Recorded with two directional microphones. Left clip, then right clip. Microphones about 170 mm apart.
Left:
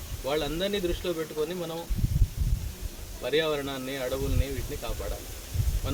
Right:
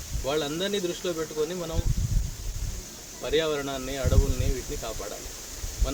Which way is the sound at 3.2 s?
5° left (ahead or behind).